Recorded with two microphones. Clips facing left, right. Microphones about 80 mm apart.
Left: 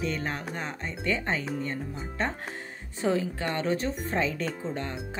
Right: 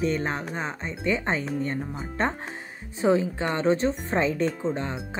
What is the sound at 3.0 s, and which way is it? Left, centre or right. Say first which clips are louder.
Speech: right 5 dB; right.